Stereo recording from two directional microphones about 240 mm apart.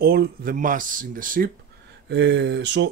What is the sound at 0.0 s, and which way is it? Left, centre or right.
Speech, right.